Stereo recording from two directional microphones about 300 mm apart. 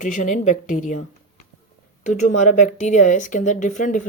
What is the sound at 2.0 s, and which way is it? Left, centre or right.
Speech, left.